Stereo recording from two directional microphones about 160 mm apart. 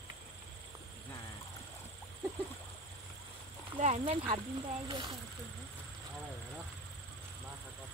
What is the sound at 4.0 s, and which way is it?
Speech, 35° right (ahead or behind).